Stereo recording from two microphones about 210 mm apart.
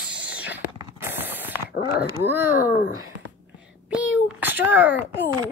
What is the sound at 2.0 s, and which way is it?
Speech, 10° right (ahead or behind).